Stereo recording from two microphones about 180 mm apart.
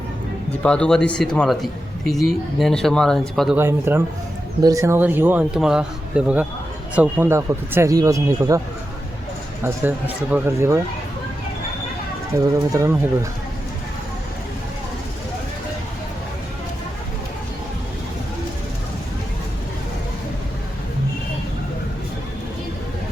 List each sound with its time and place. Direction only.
0.6 s a man's voice: 5° left (ahead or behind)
3.6 s speech: 15° right (ahead or behind)
10.3 s speech: 15° right (ahead or behind)
12.3 s speech: 15° right (ahead or behind)